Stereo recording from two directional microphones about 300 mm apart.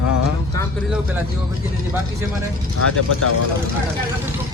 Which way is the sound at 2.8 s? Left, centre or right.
Left.